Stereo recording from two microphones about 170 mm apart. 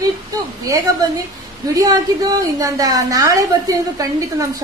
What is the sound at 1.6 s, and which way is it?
A woman's voice, 20° right (ahead or behind).